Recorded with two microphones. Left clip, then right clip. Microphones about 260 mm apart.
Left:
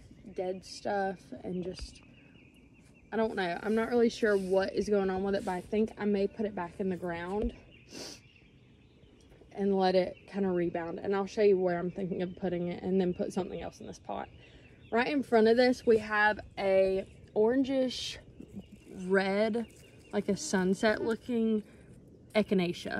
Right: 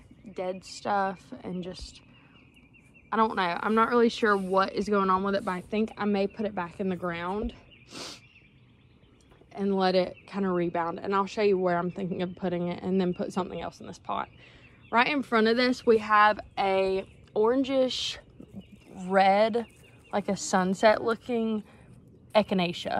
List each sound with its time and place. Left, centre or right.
0.3 s speech: centre
3.1 s speech: centre
9.5 s speech: centre
17.0 s a sound: right
17.6 s speech: centre